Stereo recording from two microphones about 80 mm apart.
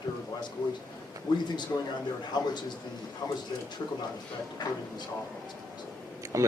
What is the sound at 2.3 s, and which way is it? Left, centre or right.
Speech, left.